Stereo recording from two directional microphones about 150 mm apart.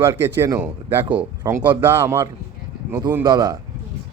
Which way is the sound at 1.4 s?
30° right (ahead or behind).